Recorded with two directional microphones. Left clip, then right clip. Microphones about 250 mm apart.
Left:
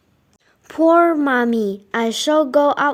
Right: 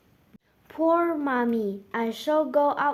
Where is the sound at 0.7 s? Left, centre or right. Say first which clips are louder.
Left 10 dB; left.